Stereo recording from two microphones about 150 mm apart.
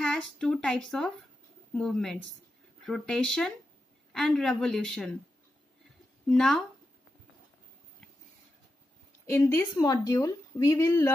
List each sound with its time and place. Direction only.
0.0 s speech: 5° left (ahead or behind)
6.2 s speech: 5° left (ahead or behind)
9.2 s a woman's voice: 15° left (ahead or behind)